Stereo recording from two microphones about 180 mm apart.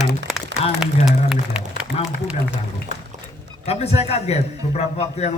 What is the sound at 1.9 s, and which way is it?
Speech, 30° left (ahead or behind).